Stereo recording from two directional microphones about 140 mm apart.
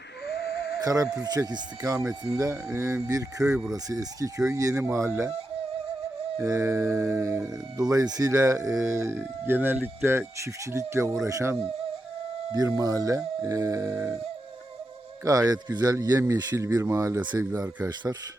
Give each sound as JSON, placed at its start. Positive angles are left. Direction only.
{"t": 0.8, "sound": "speech", "side_deg": -25}
{"t": 4.7, "sound": "speech", "side_deg": -10}
{"t": 6.4, "sound": "speech", "side_deg": -20}
{"t": 15.2, "sound": "speech", "side_deg": -25}